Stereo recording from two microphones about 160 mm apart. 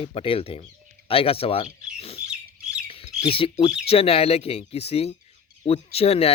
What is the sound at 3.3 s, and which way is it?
Speech, 35° left (ahead or behind).